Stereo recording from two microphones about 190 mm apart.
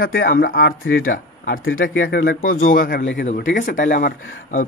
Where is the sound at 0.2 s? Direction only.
50° left (ahead or behind).